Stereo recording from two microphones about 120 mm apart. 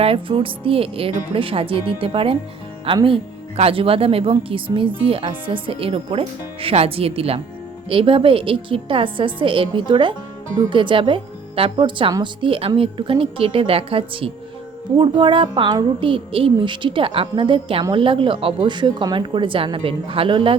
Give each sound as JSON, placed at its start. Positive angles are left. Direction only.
{"t": 0.0, "sound": "a woman's voice", "side_deg": -50}